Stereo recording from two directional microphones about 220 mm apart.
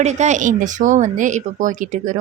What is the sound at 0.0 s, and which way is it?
A woman's voice, 30° right (ahead or behind).